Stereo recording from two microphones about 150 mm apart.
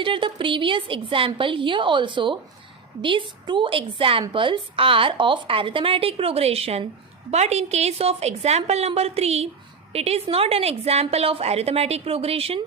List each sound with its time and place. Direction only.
0.0 s a woman's voice: 35° right (ahead or behind)